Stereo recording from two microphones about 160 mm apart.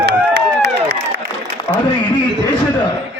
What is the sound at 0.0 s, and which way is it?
Run, 90° right.